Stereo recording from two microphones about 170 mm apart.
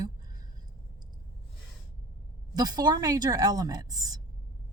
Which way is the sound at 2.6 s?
25° right (ahead or behind).